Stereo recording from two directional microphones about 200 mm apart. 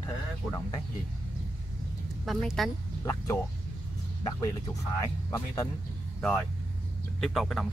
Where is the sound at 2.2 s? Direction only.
Centre (ahead or behind).